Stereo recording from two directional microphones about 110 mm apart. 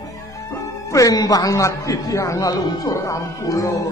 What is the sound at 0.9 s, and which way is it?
A man's voice, 35° left (ahead or behind).